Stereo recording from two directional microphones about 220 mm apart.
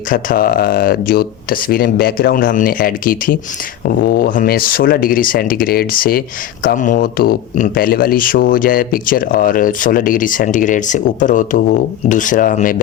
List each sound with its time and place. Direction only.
0.1 s speech: 40° left (ahead or behind)